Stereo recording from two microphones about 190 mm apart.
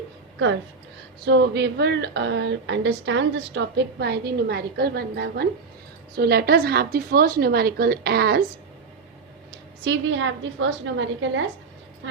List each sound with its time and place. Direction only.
1.2 s speech: 60° right (ahead or behind)
9.5 s a woman's voice: 65° right (ahead or behind)